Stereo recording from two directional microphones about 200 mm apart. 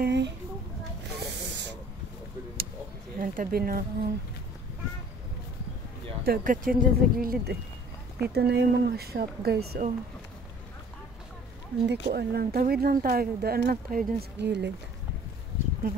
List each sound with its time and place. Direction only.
0.0 s a sound: 60° right (ahead or behind)
1.0 s snake: 60° right (ahead or behind)
3.2 s speech: 45° right (ahead or behind)
6.2 s speech: 45° right (ahead or behind)
11.8 s speech: 55° right (ahead or behind)